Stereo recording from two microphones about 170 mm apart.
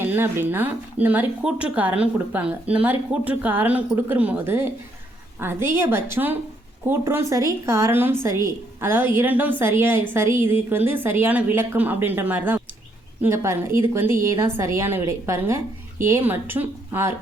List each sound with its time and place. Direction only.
0.0 s a woman's voice: 15° right (ahead or behind)